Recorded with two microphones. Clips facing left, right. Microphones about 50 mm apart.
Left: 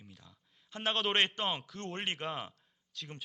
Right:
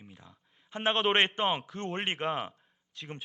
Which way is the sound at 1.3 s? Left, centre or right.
Right.